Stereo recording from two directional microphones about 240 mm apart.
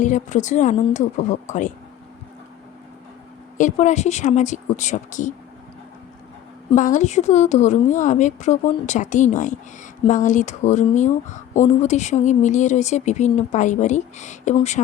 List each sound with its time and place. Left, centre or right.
0.0 s speech: left
3.6 s speech: left
6.7 s speech: left